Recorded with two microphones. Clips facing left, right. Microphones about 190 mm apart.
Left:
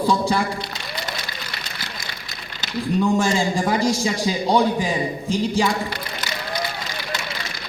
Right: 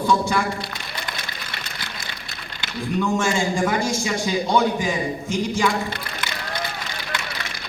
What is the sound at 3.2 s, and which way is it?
A man's voice, 35° left (ahead or behind).